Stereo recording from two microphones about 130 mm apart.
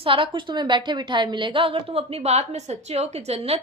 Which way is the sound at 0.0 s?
40° right (ahead or behind).